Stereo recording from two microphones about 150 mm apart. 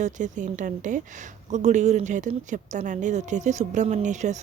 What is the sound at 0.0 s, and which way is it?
A woman's voice, 55° right (ahead or behind).